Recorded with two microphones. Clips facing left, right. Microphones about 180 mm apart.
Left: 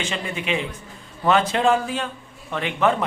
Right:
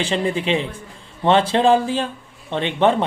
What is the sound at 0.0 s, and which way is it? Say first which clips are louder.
A man's voice: right 7 dB; 30° right (ahead or behind).